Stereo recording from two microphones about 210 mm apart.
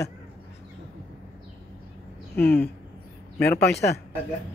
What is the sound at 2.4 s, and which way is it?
Speech, 50° left (ahead or behind).